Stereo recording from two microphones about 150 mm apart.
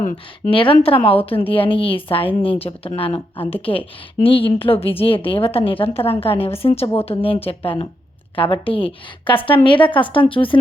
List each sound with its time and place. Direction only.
0.0 s speech: 60° left (ahead or behind)
0.5 s a woman's voice: 35° left (ahead or behind)